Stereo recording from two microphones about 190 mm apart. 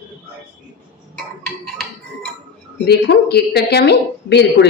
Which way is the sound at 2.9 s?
60° left (ahead or behind).